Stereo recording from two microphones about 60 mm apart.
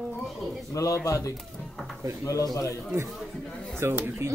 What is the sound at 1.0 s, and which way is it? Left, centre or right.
A man's voice, left.